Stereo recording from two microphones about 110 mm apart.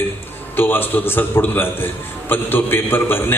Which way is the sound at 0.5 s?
20° left (ahead or behind).